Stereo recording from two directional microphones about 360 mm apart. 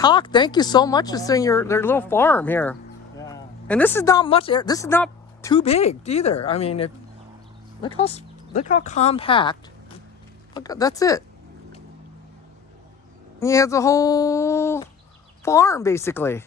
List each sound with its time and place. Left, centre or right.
0.0 s speech: centre
13.4 s speech: centre